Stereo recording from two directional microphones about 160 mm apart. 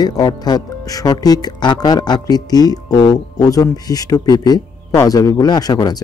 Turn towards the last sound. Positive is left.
turn(degrees=25)  # may be behind; listen again after turning